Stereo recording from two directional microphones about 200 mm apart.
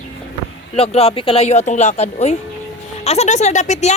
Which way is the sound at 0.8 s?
30° left (ahead or behind).